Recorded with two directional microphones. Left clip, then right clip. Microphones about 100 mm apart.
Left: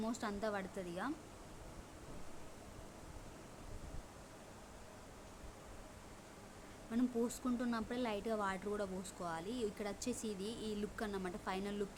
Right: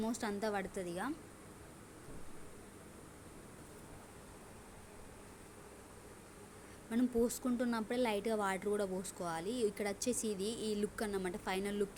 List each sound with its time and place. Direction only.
0.1 s speech: 25° right (ahead or behind)
6.9 s speech: 25° right (ahead or behind)